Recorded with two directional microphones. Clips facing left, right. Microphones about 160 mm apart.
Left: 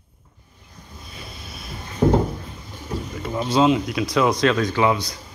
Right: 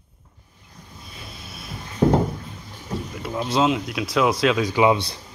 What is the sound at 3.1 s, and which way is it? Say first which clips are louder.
Speech: left 3 dB; centre (ahead or behind).